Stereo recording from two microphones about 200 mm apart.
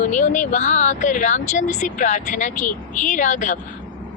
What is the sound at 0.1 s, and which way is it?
Speech, 40° left (ahead or behind).